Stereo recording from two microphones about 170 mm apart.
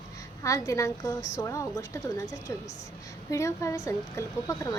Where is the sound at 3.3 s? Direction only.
20° left (ahead or behind).